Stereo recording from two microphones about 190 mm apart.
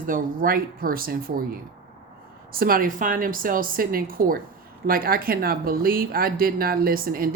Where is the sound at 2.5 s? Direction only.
50° right (ahead or behind).